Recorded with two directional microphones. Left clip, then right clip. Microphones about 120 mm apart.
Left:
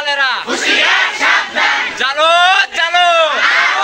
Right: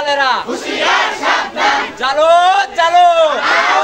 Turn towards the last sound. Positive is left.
turn(degrees=-30)  # may be behind; listen again after turning